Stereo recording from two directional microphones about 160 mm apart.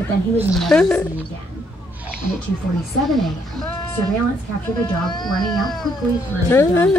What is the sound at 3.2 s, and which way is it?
Speech, 5° left (ahead or behind).